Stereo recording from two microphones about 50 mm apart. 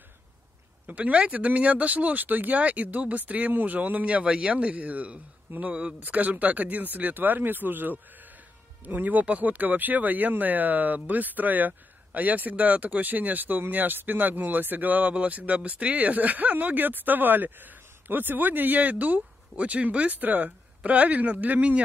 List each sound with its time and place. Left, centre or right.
0.8 s speech: right